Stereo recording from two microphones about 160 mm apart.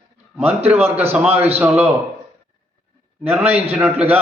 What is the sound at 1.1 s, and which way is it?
Speech, 10° right (ahead or behind).